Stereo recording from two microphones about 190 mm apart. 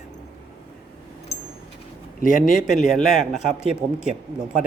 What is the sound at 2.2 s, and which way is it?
Speech, 45° left (ahead or behind).